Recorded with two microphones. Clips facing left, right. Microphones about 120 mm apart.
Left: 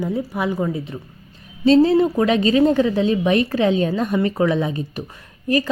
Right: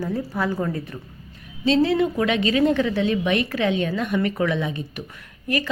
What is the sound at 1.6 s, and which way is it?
A woman's voice, 35° left (ahead or behind).